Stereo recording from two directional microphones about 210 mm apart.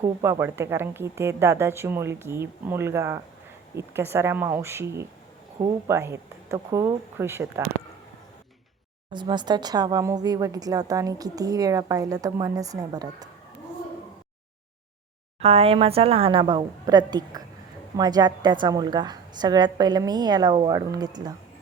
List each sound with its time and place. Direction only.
0.0 s a woman's voice: 15° right (ahead or behind)
9.1 s a woman's voice: 20° right (ahead or behind)
15.4 s a woman's voice: 30° right (ahead or behind)